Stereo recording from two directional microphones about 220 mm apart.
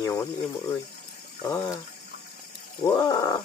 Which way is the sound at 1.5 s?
10° left (ahead or behind).